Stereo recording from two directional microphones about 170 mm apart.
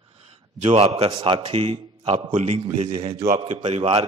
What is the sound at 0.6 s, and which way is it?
A man's voice, 35° right (ahead or behind).